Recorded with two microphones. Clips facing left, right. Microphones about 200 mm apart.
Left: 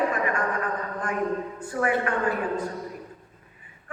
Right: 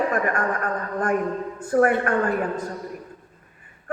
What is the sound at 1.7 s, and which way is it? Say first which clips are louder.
Speech: right 6 dB; 50° right (ahead or behind).